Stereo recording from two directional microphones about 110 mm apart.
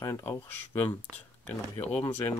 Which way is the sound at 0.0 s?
25° left (ahead or behind).